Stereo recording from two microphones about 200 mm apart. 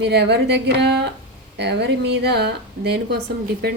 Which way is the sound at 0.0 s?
55° right (ahead or behind).